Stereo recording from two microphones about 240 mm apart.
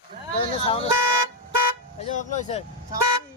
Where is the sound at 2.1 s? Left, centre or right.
Left.